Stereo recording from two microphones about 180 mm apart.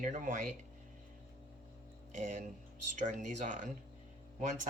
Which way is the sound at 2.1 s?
40° right (ahead or behind).